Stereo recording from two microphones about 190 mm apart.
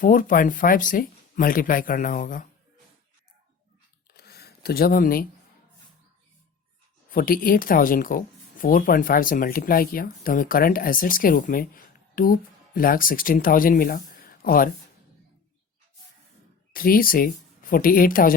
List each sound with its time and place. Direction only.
0.0 s speech: 45° left (ahead or behind)
4.1 s a sound: 55° left (ahead or behind)
7.1 s speech: 50° left (ahead or behind)
16.7 s speech: 50° left (ahead or behind)